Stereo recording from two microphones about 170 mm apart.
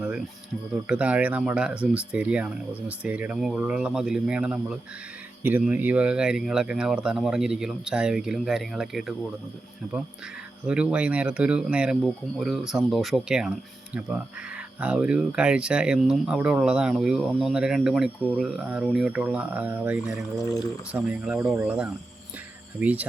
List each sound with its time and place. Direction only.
0.0 s a sound: 5° right (ahead or behind)
0.9 s speech: 5° right (ahead or behind)
10.7 s speech: 5° right (ahead or behind)
14.8 s speech: 5° right (ahead or behind)
20.4 s speech: 20° left (ahead or behind)
20.9 s speech: 5° right (ahead or behind)